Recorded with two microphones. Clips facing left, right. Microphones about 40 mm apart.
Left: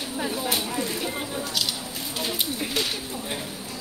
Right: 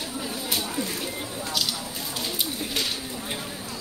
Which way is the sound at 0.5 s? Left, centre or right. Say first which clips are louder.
Left 2 dB; centre.